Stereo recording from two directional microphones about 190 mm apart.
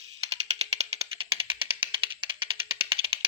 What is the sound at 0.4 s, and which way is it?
Music, 35° right (ahead or behind).